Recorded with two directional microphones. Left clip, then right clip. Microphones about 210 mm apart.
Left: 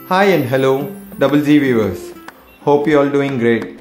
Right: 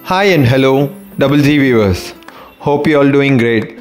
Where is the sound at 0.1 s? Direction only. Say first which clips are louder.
Right 2 dB; 40° right (ahead or behind).